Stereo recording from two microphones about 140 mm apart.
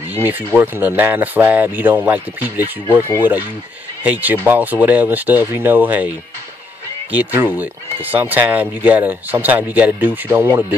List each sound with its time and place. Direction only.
0.1 s speech: 15° right (ahead or behind)
7.1 s speech: 15° right (ahead or behind)